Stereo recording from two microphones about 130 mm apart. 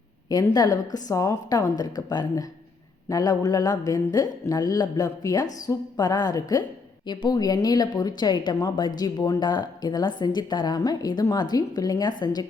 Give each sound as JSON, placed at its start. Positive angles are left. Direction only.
{"t": 0.3, "sound": "speech", "side_deg": 30}